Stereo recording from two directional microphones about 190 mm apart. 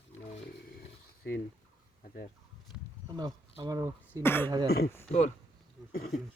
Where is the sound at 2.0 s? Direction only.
50° left (ahead or behind).